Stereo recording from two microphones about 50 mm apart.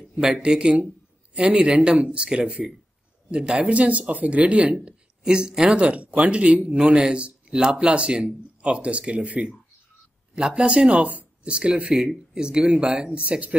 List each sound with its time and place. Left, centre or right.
0.5 s speech: centre